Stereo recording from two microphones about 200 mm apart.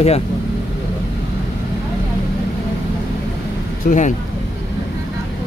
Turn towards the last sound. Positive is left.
turn(degrees=35)  # may be behind; listen again after turning